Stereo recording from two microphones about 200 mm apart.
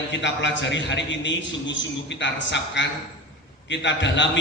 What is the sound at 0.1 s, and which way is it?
A man's voice, 65° left (ahead or behind).